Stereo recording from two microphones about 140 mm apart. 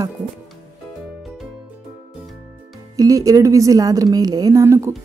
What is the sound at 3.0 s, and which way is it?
A woman's voice, 25° right (ahead or behind).